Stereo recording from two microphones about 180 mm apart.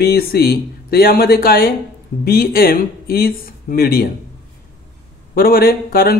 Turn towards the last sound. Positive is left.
turn(degrees=55)  # may be behind; listen again after turning